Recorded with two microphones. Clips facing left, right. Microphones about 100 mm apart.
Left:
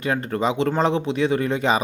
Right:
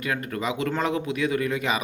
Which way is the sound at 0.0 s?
30° left (ahead or behind).